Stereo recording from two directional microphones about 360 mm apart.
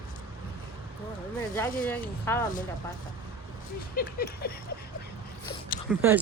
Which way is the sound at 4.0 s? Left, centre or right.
Left.